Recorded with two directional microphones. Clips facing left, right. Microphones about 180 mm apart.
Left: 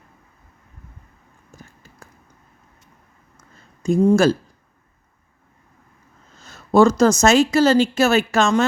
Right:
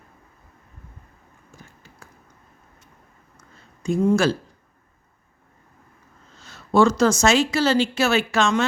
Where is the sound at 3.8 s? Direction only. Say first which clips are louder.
Left 4 dB; 40° left (ahead or behind).